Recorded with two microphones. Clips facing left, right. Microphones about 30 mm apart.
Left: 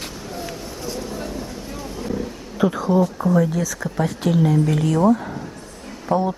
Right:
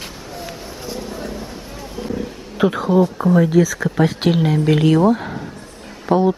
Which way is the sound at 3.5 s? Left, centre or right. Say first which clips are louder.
Right 9 dB; right.